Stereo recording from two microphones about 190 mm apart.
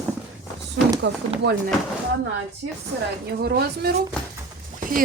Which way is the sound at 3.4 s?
55° right (ahead or behind).